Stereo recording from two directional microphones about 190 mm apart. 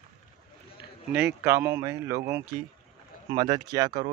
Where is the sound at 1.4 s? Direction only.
15° right (ahead or behind).